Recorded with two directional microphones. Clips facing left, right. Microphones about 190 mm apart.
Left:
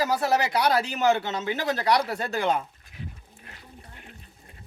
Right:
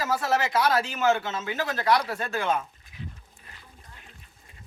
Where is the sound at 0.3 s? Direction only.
35° left (ahead or behind).